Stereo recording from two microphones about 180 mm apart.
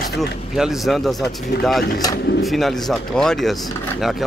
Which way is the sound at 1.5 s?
60° left (ahead or behind).